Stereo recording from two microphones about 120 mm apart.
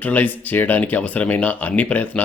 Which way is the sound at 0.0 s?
15° left (ahead or behind).